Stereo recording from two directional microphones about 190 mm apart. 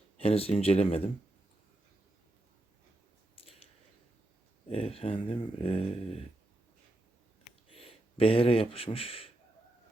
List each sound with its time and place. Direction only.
0.2 s speech: 30° left (ahead or behind)
3.3 s a sound: 30° left (ahead or behind)
4.7 s speech: 30° left (ahead or behind)
7.7 s speech: 30° left (ahead or behind)